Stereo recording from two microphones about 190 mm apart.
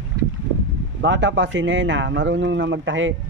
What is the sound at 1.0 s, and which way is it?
A man's voice, 70° right (ahead or behind).